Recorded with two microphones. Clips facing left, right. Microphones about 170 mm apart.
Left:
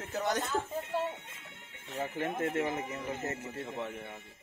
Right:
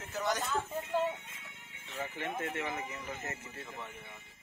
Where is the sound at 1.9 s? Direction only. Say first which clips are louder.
Left 4 dB; 45° left (ahead or behind).